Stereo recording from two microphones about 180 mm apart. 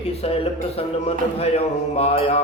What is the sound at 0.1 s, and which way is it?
A man's voice, 35° left (ahead or behind).